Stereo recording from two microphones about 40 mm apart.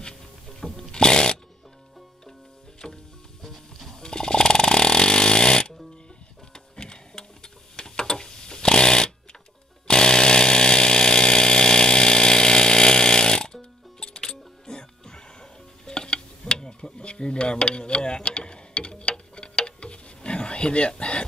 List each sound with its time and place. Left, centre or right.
0.6 s chainsaw: centre
2.8 s music: centre
3.4 s music: centre
3.9 s chainsaw: centre
6.5 s a sound: centre
9.8 s chainsaw: centre
20.2 s a sound: left